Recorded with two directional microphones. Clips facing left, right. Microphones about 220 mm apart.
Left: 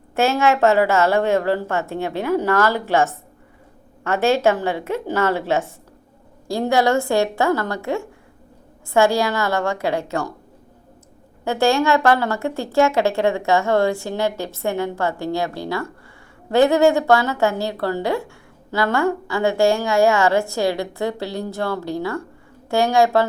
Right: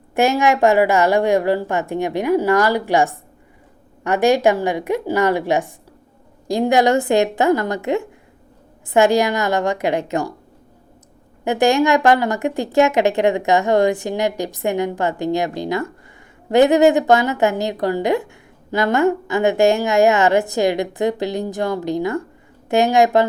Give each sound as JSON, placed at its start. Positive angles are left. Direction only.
{"t": 0.1, "sound": "a woman's voice", "side_deg": -15}
{"t": 11.4, "sound": "a woman's voice", "side_deg": -15}